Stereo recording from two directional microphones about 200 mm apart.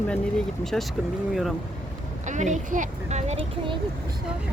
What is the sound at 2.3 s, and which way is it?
Speech, 40° right (ahead or behind).